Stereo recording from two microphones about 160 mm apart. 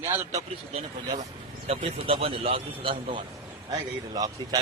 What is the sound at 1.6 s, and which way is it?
A man's voice, 40° right (ahead or behind).